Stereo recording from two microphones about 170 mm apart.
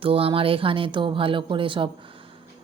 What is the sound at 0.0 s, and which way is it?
Speech, 35° right (ahead or behind).